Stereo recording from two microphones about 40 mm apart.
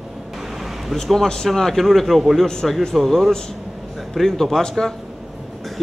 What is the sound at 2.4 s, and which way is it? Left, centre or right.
Speech, centre.